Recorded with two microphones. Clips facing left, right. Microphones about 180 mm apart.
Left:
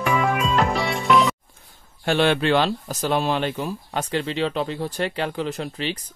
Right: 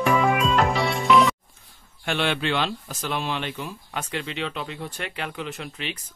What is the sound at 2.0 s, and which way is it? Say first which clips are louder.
Speech: left 6 dB; 40° left (ahead or behind).